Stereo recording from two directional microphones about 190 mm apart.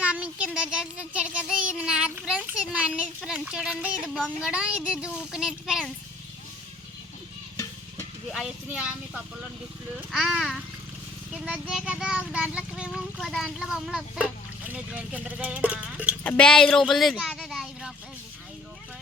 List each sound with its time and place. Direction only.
0.0 s child singing: 5° right (ahead or behind)
7.5 s stir: 15° left (ahead or behind)
8.3 s child singing: 5° right (ahead or behind)
14.7 s speech: 5° right (ahead or behind)
16.2 s child singing: 5° left (ahead or behind)